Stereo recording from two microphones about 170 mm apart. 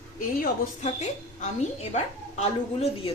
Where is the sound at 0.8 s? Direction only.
40° left (ahead or behind).